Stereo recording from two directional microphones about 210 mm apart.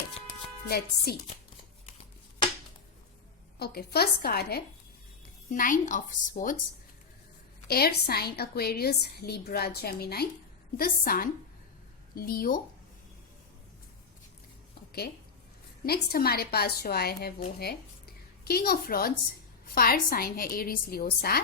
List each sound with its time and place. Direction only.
0.7 s a woman's voice: 50° left (ahead or behind)
3.6 s a woman's voice: 50° left (ahead or behind)
7.7 s a woman's voice: 50° left (ahead or behind)
15.8 s a woman's voice: 45° left (ahead or behind)